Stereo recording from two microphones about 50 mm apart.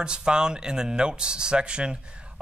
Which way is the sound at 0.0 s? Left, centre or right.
Centre.